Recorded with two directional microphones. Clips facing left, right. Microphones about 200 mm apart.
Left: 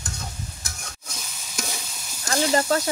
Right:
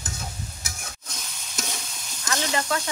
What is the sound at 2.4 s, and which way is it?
Speech, 40° left (ahead or behind).